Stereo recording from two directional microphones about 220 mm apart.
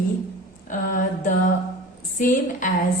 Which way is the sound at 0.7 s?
35° left (ahead or behind).